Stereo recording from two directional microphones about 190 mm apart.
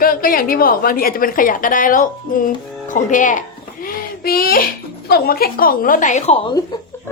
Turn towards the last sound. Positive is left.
turn(degrees=35)  # may be behind; listen again after turning